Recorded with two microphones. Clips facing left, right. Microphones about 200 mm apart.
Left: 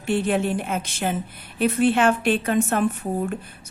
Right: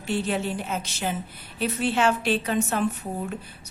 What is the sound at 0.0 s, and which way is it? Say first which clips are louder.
A woman's voice: left 5 dB; 55° left (ahead or behind).